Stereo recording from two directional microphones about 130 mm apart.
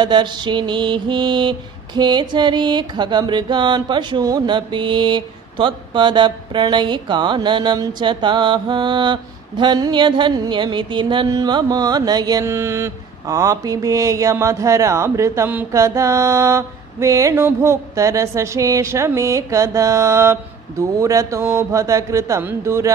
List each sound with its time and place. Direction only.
0.0 s mantra: 35° right (ahead or behind)
22.4 s speech: 15° right (ahead or behind)